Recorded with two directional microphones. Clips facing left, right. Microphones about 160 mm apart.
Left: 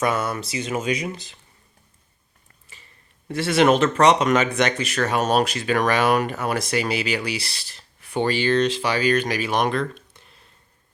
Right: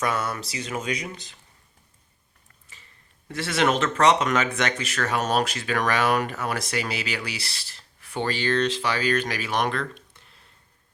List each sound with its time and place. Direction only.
0.0 s speech: 10° left (ahead or behind)
3.2 s speech: 15° left (ahead or behind)